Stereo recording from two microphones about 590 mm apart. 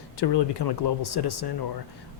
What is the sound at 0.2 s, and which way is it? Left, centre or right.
Speech, left.